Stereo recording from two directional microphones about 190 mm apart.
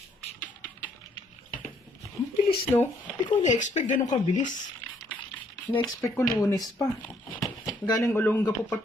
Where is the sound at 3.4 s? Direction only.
40° left (ahead or behind).